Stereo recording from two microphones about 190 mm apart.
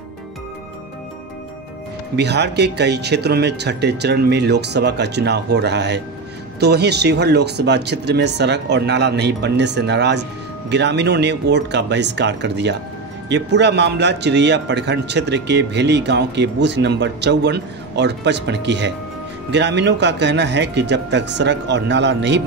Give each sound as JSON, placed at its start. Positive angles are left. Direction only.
{"t": 2.1, "sound": "a man's voice", "side_deg": -60}